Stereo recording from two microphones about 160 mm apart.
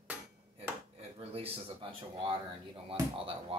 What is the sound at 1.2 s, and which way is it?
Speech, 35° right (ahead or behind).